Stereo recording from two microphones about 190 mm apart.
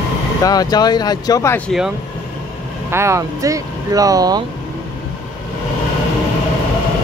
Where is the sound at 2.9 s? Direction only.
15° right (ahead or behind).